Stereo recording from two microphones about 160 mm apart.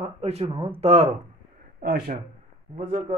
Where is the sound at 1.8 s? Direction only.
65° right (ahead or behind).